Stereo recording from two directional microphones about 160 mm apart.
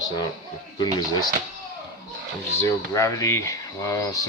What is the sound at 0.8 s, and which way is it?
Speech, 25° left (ahead or behind).